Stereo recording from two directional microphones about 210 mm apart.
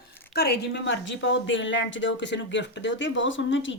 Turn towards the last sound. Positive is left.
turn(degrees=60)  # may be behind; listen again after turning